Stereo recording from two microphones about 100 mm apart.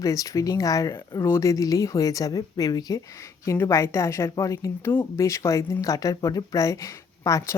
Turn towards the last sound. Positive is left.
turn(degrees=35)  # may be behind; listen again after turning